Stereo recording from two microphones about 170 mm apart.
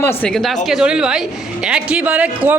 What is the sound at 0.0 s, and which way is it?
A woman's voice, 10° left (ahead or behind).